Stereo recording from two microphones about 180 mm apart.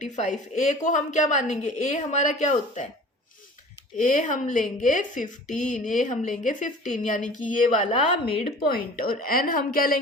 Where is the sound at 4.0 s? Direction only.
45° left (ahead or behind).